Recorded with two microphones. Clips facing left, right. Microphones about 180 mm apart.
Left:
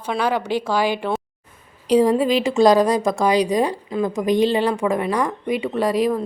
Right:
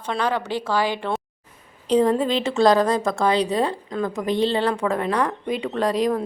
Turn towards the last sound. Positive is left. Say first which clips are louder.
# left 2 dB
turn(degrees=5)  # may be behind; listen again after turning